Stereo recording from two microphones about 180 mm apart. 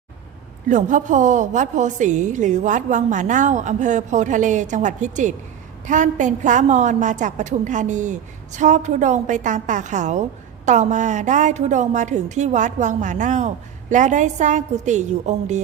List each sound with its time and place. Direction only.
0.7 s a woman's voice: 45° right (ahead or behind)